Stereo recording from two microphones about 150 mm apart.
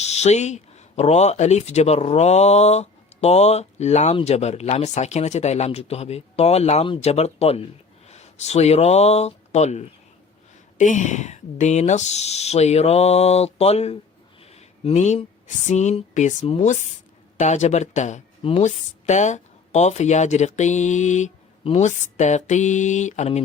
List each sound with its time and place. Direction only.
0.0 s speech: 45° left (ahead or behind)
14.5 s a sound: 50° left (ahead or behind)
15.4 s speech: 50° left (ahead or behind)